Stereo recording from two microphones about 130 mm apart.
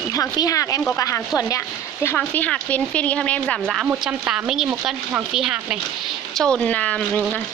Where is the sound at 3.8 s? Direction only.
10° right (ahead or behind).